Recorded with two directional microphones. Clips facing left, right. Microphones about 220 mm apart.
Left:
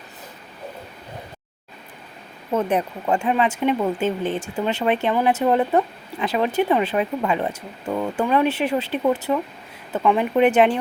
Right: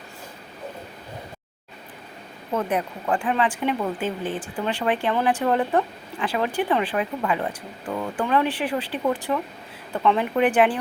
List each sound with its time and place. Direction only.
2.6 s speech: 25° left (ahead or behind)